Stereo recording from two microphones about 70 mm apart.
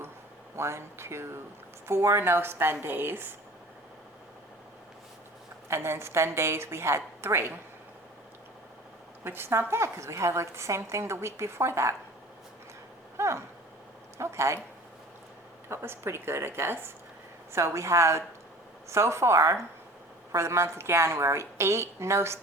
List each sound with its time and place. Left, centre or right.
0.5 s a woman's voice: right
5.6 s a woman's voice: right
9.2 s a woman's voice: right
13.1 s a sound: right
14.2 s a woman's voice: right
15.7 s a woman's voice: right